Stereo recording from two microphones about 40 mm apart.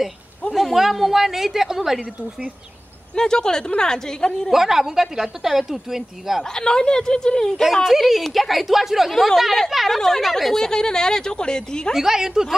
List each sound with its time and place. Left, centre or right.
0.5 s a sound: centre
0.7 s a woman's voice: centre
3.2 s speech: centre
4.5 s a woman's voice: centre
6.5 s speech: centre
7.8 s a woman's voice: centre
9.9 s speech: centre
11.9 s a woman's voice: centre